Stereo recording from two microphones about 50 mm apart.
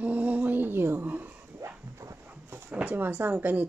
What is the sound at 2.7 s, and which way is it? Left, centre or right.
Speech, right.